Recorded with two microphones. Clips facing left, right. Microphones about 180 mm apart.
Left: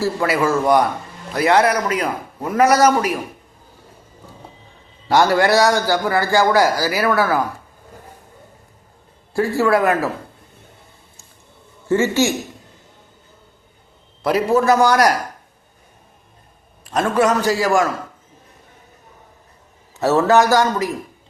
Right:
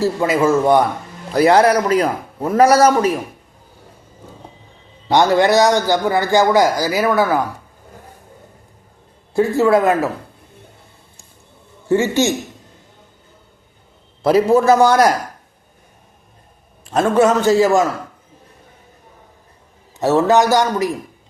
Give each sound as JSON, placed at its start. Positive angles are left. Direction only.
{"t": 0.0, "sound": "a man's voice", "side_deg": -20}
{"t": 5.0, "sound": "a man's voice", "side_deg": -20}
{"t": 9.3, "sound": "a man's voice", "side_deg": -20}
{"t": 11.9, "sound": "a man's voice", "side_deg": -15}
{"t": 14.2, "sound": "a man's voice", "side_deg": -30}
{"t": 16.8, "sound": "a man's voice", "side_deg": -25}
{"t": 20.0, "sound": "a man's voice", "side_deg": -15}